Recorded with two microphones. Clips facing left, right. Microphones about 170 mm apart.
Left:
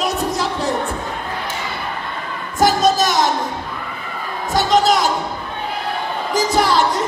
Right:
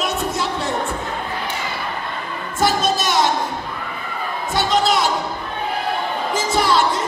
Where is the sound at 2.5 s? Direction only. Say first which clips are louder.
Left 4 dB; 40° left (ahead or behind).